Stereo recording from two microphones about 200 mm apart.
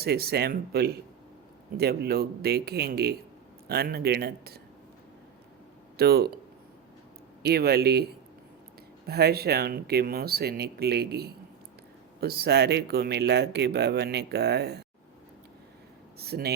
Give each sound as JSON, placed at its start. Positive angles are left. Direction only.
{"t": 0.0, "sound": "speech", "side_deg": -50}
{"t": 6.0, "sound": "speech", "side_deg": -55}
{"t": 7.4, "sound": "speech", "side_deg": -50}
{"t": 9.0, "sound": "speech", "side_deg": -55}
{"t": 16.1, "sound": "speech", "side_deg": -50}